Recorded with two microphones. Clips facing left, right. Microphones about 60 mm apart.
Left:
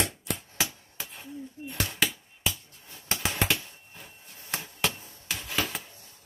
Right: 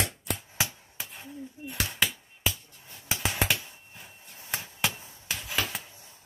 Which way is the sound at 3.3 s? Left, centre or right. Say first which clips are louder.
Even; centre.